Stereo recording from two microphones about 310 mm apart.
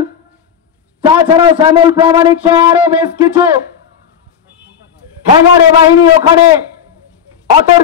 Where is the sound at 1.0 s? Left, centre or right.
Centre.